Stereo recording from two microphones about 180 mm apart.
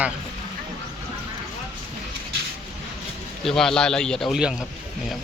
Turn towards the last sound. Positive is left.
turn(degrees=-5)  # may be behind; listen again after turning